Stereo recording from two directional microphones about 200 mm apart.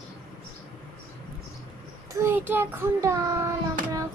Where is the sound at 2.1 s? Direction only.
10° right (ahead or behind).